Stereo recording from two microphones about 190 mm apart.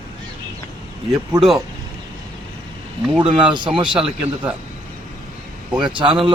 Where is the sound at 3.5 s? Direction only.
25° right (ahead or behind).